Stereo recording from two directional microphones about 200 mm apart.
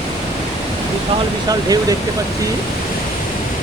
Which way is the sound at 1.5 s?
20° right (ahead or behind).